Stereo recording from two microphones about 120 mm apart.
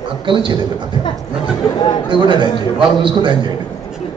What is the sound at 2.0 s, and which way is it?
A man's voice, 40° right (ahead or behind).